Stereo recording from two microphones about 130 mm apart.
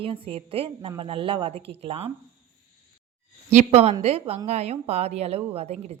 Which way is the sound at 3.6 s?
55° right (ahead or behind).